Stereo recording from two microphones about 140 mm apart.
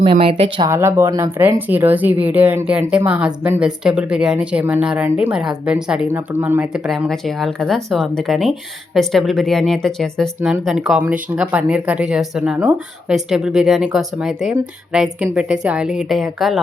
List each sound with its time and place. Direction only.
0.0 s speech: 40° right (ahead or behind)
0.7 s speech: 20° right (ahead or behind); by 16.6 s centre (ahead or behind)